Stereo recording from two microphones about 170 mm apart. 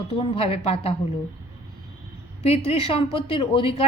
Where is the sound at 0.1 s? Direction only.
35° left (ahead or behind).